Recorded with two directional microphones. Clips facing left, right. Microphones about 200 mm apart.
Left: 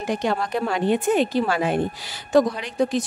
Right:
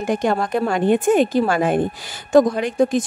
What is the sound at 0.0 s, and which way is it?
A woman's voice, 50° right (ahead or behind).